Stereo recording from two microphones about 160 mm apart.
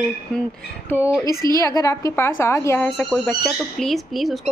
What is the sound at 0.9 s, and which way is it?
A woman's voice, 15° left (ahead or behind).